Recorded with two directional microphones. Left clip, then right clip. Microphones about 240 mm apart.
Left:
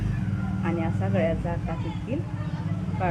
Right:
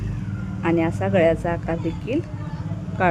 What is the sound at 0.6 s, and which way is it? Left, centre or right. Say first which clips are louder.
Speech: right 9 dB; right.